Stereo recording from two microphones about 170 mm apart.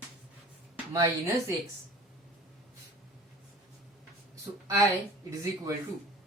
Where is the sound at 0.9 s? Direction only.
15° right (ahead or behind).